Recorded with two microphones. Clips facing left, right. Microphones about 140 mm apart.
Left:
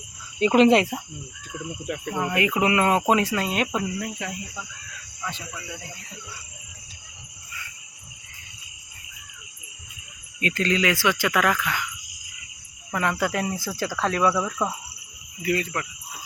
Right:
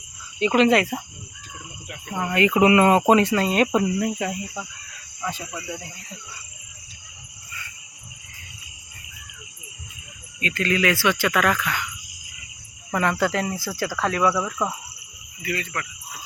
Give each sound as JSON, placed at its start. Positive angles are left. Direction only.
{"t": 0.3, "sound": "speech", "side_deg": 35}
{"t": 2.0, "sound": "speech", "side_deg": 5}
{"t": 2.6, "sound": "speech", "side_deg": -5}
{"t": 10.6, "sound": "speech", "side_deg": 20}
{"t": 12.9, "sound": "speech", "side_deg": 5}
{"t": 14.0, "sound": "speech", "side_deg": -10}